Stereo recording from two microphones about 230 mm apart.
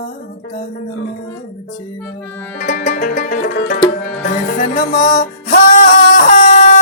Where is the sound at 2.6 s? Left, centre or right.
Left.